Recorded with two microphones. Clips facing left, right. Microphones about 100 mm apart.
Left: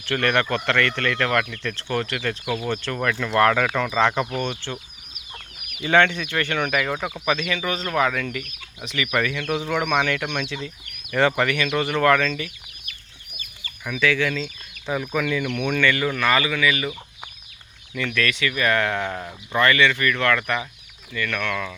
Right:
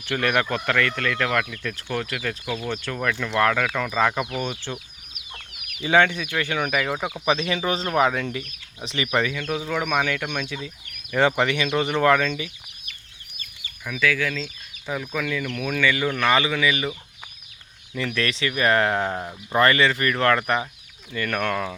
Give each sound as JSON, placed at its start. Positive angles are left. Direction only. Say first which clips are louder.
{"t": 0.0, "sound": "speech", "louder": "left 1 dB", "side_deg": -10}
{"t": 2.4, "sound": "speech", "louder": "left 3 dB", "side_deg": 10}
{"t": 2.8, "sound": "speech", "louder": "left 2 dB", "side_deg": -5}
{"t": 7.3, "sound": "speech", "louder": "right 1 dB", "side_deg": -30}
{"t": 9.4, "sound": "speech", "louder": "left 2 dB", "side_deg": 0}
{"t": 11.1, "sound": "speech", "louder": "even", "side_deg": -15}
{"t": 13.8, "sound": "speech", "louder": "left 2 dB", "side_deg": 0}
{"t": 17.9, "sound": "speech", "louder": "left 1 dB", "side_deg": -30}
{"t": 19.5, "sound": "speech", "louder": "even", "side_deg": -35}